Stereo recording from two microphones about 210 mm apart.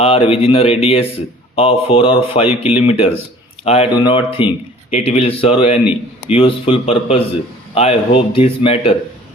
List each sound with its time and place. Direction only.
0.0 s a man's voice: 25° left (ahead or behind)